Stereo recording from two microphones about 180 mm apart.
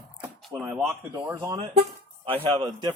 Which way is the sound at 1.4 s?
20° right (ahead or behind).